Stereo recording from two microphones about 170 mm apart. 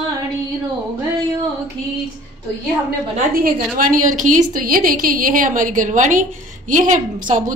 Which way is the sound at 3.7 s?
50° right (ahead or behind).